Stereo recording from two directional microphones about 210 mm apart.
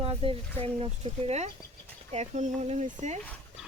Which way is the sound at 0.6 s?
25° right (ahead or behind).